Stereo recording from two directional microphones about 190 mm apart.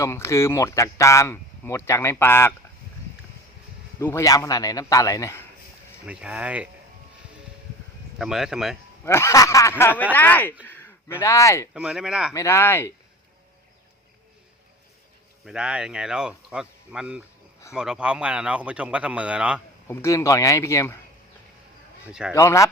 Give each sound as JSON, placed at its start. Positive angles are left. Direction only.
{"t": 0.0, "sound": "speech", "side_deg": 15}
{"t": 4.0, "sound": "speech", "side_deg": 15}
{"t": 6.1, "sound": "speech", "side_deg": -5}
{"t": 8.2, "sound": "speech", "side_deg": 0}
{"t": 9.0, "sound": "speech", "side_deg": 15}
{"t": 11.7, "sound": "speech", "side_deg": -5}
{"t": 12.3, "sound": "speech", "side_deg": 15}
{"t": 15.4, "sound": "speech", "side_deg": -5}
{"t": 19.9, "sound": "speech", "side_deg": 15}
{"t": 22.0, "sound": "speech", "side_deg": -5}
{"t": 22.4, "sound": "speech", "side_deg": 15}